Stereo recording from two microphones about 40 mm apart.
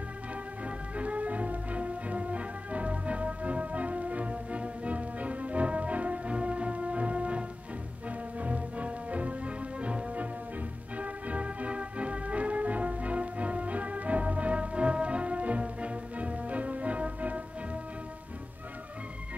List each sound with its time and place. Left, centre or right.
0.7 s music: right